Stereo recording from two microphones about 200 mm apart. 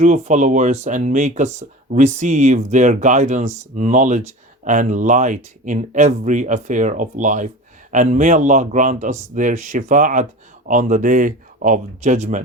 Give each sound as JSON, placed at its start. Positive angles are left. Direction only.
{"t": 0.0, "sound": "speech", "side_deg": -35}